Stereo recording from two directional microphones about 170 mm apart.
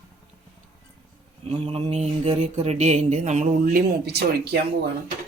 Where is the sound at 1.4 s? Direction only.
40° right (ahead or behind).